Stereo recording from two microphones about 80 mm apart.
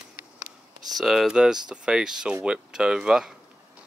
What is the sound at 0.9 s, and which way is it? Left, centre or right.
Speech, centre.